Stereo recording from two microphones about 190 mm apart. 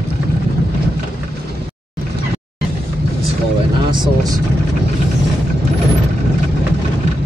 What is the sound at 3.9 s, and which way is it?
Vehicle, 20° right (ahead or behind).